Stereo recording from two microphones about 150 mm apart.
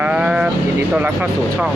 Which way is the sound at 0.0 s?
10° right (ahead or behind).